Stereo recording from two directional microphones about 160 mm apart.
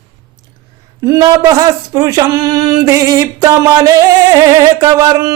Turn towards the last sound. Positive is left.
turn(degrees=-20)  # may be behind; listen again after turning